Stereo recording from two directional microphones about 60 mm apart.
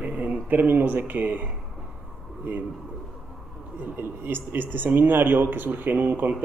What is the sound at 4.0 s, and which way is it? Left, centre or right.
A man's voice, right.